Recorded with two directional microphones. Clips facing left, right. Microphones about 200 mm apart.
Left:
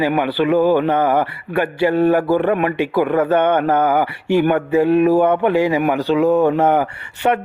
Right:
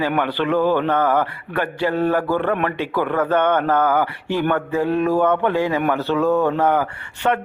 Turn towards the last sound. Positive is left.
turn(degrees=20)  # may be behind; listen again after turning